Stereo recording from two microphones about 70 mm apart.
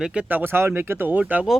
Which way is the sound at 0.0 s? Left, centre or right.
Centre.